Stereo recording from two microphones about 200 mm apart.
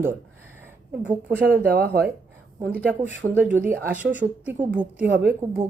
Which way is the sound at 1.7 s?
55° right (ahead or behind).